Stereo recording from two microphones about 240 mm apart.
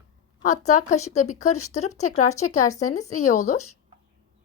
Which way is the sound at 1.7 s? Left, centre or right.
Left.